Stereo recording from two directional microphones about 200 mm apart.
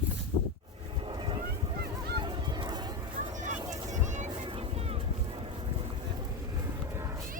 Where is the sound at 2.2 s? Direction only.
25° right (ahead or behind).